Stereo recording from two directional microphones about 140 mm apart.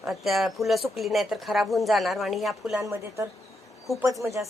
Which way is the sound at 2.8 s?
20° right (ahead or behind).